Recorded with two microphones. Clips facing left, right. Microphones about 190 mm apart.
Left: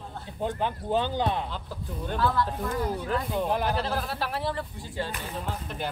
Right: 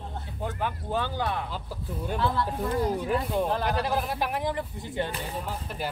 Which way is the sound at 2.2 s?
25° right (ahead or behind).